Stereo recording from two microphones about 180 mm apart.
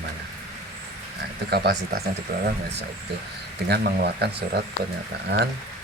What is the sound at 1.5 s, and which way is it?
Speech, 65° right (ahead or behind).